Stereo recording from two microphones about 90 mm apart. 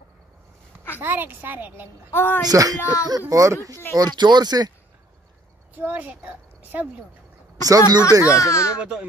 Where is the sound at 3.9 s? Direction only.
50° right (ahead or behind).